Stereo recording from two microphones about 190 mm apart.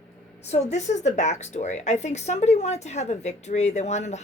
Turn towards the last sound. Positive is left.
turn(degrees=35)  # may be behind; listen again after turning